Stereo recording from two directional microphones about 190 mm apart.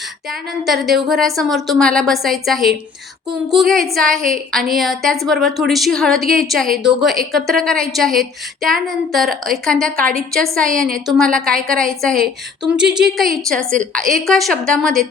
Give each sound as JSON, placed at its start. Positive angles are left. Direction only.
{"t": 0.3, "sound": "a woman's voice", "side_deg": 0}
{"t": 9.9, "sound": "a woman's voice", "side_deg": -50}
{"t": 10.3, "sound": "a woman's voice", "side_deg": 0}